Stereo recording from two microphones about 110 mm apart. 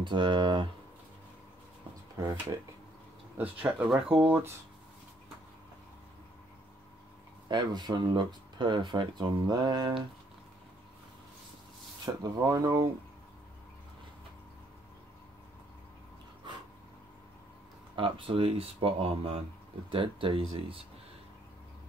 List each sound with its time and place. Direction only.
0.0 s speech: 45° right (ahead or behind)
2.1 s speech: 30° right (ahead or behind)
3.3 s speech: 15° right (ahead or behind)
7.4 s speech: 40° right (ahead or behind)
12.2 s speech: 30° right (ahead or behind)
17.9 s speech: 50° right (ahead or behind)